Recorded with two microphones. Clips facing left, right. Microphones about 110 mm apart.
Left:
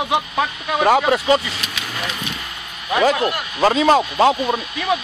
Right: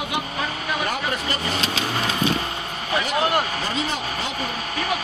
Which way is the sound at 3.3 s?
45° right (ahead or behind).